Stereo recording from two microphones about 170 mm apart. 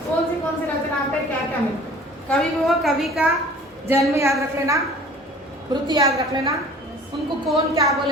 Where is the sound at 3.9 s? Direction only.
15° right (ahead or behind).